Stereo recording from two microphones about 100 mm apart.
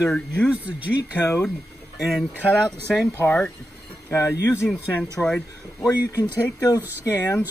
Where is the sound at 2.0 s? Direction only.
Centre (ahead or behind).